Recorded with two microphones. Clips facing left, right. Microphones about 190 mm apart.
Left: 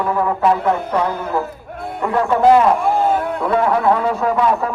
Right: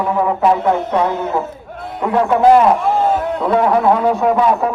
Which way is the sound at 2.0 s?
5° right (ahead or behind).